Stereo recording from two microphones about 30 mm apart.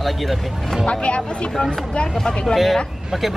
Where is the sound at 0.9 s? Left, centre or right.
Left.